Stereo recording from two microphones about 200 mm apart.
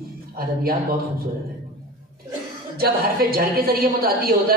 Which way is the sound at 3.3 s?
50° right (ahead or behind).